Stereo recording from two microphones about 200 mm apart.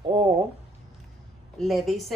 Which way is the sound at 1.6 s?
Centre (ahead or behind).